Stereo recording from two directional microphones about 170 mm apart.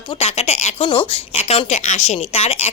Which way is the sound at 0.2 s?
40° left (ahead or behind).